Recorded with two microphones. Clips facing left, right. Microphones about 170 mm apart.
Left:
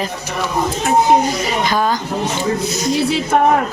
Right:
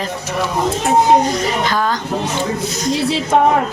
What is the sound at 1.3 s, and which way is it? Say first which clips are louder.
Speech: even; 10° left (ahead or behind).